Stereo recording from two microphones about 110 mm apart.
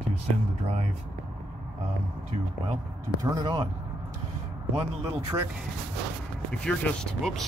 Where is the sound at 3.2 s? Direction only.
35° right (ahead or behind).